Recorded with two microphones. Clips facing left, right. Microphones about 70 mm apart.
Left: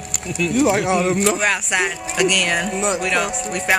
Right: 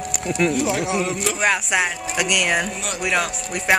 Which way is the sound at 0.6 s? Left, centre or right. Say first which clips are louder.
Left 5 dB; left.